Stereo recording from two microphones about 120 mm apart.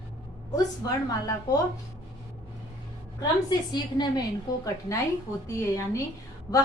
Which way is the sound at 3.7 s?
35° left (ahead or behind).